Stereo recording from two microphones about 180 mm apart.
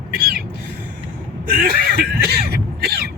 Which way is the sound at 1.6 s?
60° right (ahead or behind).